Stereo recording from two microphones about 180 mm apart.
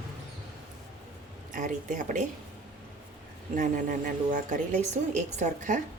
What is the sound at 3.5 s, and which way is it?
A woman's voice, 50° right (ahead or behind).